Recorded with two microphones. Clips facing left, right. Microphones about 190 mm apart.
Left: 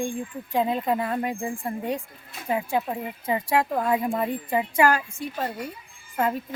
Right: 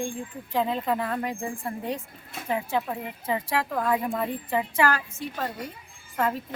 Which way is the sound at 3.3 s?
20° left (ahead or behind).